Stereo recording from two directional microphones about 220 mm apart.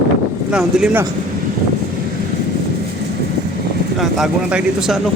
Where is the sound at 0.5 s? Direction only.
5° right (ahead or behind).